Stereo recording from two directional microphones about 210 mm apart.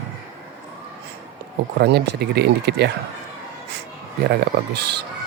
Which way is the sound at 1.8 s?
50° right (ahead or behind).